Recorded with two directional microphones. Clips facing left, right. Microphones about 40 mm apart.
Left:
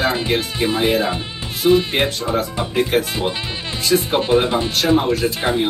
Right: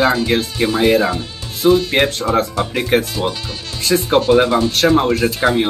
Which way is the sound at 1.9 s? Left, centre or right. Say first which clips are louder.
Right 4 dB; right.